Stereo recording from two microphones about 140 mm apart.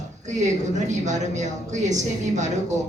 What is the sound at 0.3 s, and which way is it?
A man's voice, 60° right (ahead or behind).